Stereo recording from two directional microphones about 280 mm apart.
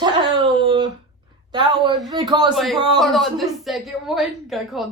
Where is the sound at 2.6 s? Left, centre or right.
Centre.